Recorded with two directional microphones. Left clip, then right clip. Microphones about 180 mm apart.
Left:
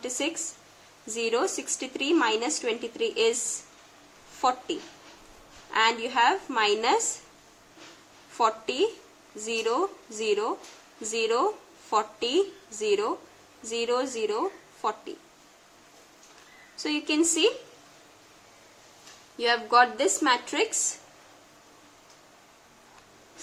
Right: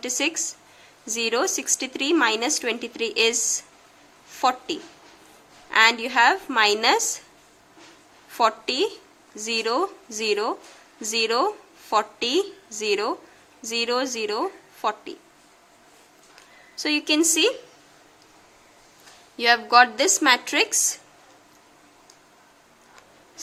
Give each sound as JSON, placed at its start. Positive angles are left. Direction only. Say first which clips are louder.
{"t": 0.0, "sound": "a woman's voice", "louder": "right 5 dB", "side_deg": -30}
{"t": 4.4, "sound": "a woman's voice", "louder": "right 3 dB", "side_deg": -30}
{"t": 8.3, "sound": "a woman's voice", "louder": "right 4 dB", "side_deg": -25}
{"t": 16.7, "sound": "a woman's voice", "louder": "right 5 dB", "side_deg": -30}
{"t": 19.4, "sound": "a woman's voice", "louder": "right 5 dB", "side_deg": -30}